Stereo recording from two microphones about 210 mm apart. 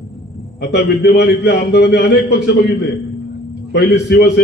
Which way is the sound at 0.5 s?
55° left (ahead or behind).